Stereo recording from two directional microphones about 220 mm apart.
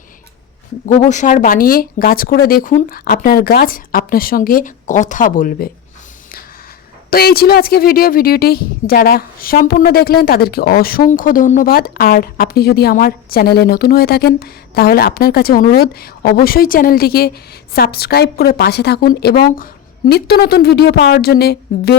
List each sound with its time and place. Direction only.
0.9 s speech: 30° left (ahead or behind)
7.1 s speech: 45° left (ahead or behind)